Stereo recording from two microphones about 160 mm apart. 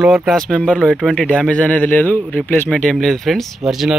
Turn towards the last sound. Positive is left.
turn(degrees=0)  # may be behind; listen again after turning